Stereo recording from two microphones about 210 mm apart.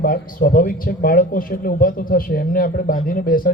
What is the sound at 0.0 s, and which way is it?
Speech, 45° left (ahead or behind).